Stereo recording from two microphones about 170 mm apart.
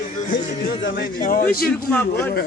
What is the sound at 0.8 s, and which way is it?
Speech, 60° left (ahead or behind).